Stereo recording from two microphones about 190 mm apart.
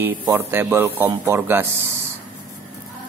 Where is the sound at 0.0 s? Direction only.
10° right (ahead or behind).